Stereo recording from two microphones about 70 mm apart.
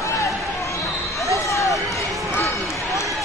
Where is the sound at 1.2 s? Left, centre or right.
Left.